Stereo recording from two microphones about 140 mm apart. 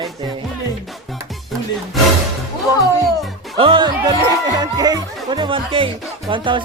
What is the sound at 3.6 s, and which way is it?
Speech, 35° right (ahead or behind).